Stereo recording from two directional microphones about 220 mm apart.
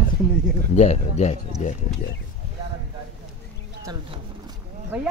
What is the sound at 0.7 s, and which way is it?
Speech, 30° left (ahead or behind).